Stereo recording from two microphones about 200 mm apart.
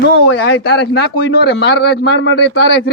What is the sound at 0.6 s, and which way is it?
Speech, 55° left (ahead or behind).